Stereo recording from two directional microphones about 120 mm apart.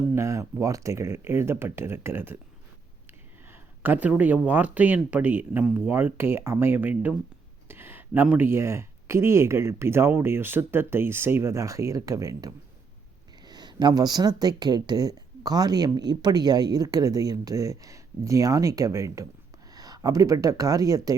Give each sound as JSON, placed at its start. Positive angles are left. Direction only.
{"t": 0.1, "sound": "speech", "side_deg": -25}